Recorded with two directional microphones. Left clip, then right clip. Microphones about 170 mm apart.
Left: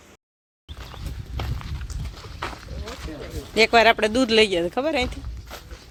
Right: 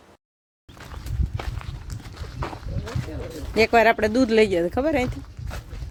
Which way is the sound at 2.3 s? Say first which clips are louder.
Left 1 dB; 40° left (ahead or behind).